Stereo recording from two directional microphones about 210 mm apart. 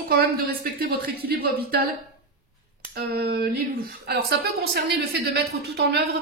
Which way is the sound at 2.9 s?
50° right (ahead or behind).